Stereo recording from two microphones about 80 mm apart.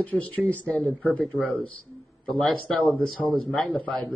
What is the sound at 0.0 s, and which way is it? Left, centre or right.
Speech, centre.